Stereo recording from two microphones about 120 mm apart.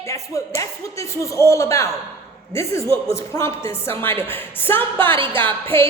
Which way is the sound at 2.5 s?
25° left (ahead or behind).